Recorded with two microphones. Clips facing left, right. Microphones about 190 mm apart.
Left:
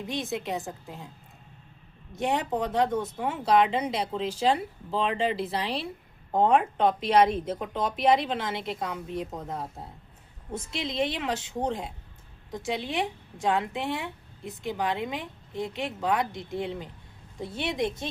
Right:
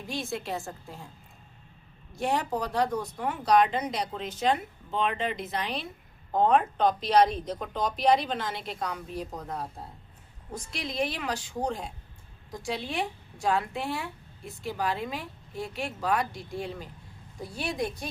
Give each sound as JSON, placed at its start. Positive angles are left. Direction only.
{"t": 0.0, "sound": "a woman's voice", "side_deg": 20}
{"t": 2.1, "sound": "a woman's voice", "side_deg": 20}
{"t": 6.5, "sound": "speech", "side_deg": 10}
{"t": 7.3, "sound": "a woman's voice", "side_deg": 25}
{"t": 7.9, "sound": "a woman's voice", "side_deg": 5}
{"t": 8.2, "sound": "a woman's voice", "side_deg": 25}